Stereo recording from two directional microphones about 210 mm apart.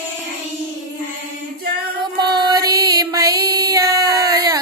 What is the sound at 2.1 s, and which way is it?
Music, 20° right (ahead or behind).